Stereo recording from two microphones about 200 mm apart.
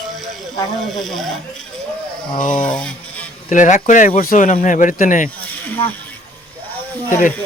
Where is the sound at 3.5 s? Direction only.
40° left (ahead or behind).